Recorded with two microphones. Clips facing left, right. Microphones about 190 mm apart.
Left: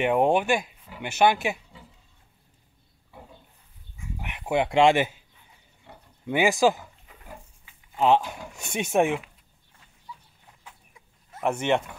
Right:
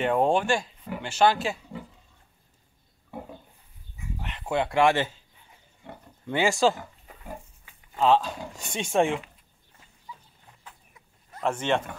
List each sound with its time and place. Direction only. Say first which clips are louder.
0.0 s speech: left 1 dB; 15° left (ahead or behind)
4.2 s speech: left 2 dB; 15° left (ahead or behind)
5.8 s pig: right 6 dB; 55° right (ahead or behind)
6.2 s speech: left 2 dB; 15° left (ahead or behind)
8.0 s speech: left 1 dB; 15° left (ahead or behind)
11.4 s speech: left 2 dB; 15° left (ahead or behind)